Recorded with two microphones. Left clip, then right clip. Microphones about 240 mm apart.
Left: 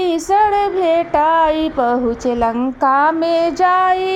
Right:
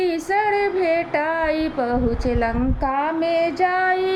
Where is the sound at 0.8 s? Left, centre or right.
Left.